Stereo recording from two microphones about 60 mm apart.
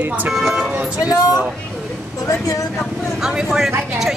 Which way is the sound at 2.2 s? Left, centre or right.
Left.